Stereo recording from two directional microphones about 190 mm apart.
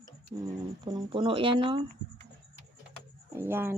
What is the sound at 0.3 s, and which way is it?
Speech, 25° right (ahead or behind).